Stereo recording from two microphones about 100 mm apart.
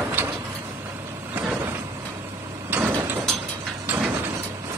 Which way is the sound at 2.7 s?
20° right (ahead or behind).